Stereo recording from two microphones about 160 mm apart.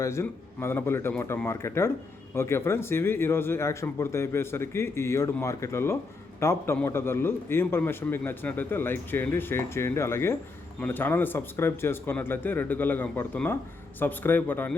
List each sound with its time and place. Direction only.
0.0 s speech: 15° left (ahead or behind)